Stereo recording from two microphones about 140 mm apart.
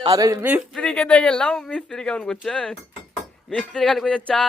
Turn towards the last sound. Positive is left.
turn(degrees=5)  # may be behind; listen again after turning